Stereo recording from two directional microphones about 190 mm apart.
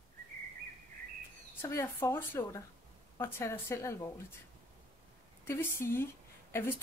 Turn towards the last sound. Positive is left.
turn(degrees=15)  # may be behind; listen again after turning